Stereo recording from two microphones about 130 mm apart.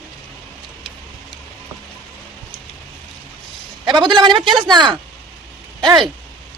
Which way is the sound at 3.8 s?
35° right (ahead or behind).